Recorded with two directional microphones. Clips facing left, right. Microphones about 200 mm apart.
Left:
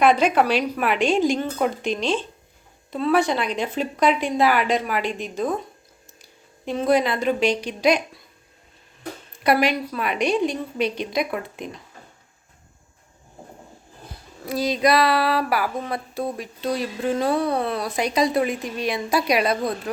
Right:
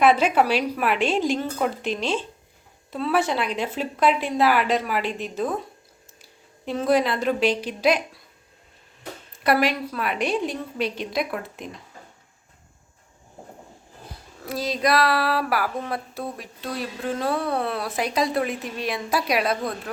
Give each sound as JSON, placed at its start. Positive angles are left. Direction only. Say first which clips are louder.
{"t": 0.0, "sound": "a woman's voice", "louder": "left 1 dB", "side_deg": -5}
{"t": 9.4, "sound": "a woman's voice", "louder": "left 1 dB", "side_deg": 0}
{"t": 14.4, "sound": "a woman's voice", "louder": "left 4 dB", "side_deg": 0}